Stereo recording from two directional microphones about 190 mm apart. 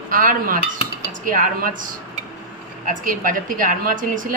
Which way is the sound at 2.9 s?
45° right (ahead or behind).